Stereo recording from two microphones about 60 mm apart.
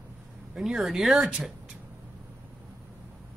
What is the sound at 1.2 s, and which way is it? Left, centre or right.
Speech, centre.